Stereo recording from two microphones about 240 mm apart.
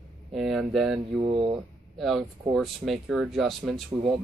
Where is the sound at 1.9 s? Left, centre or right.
Centre.